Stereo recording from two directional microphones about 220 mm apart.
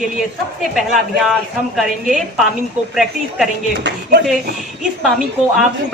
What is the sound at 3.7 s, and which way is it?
Speech, 55° right (ahead or behind).